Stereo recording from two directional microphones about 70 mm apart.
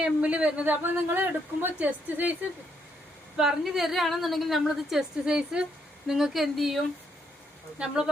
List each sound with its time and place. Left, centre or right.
0.0 s speech: centre
3.3 s a woman's voice: centre